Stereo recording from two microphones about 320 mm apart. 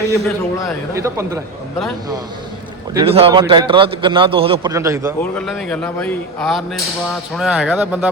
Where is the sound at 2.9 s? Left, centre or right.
Centre.